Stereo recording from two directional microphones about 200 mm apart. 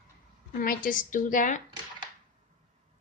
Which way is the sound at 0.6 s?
45° left (ahead or behind).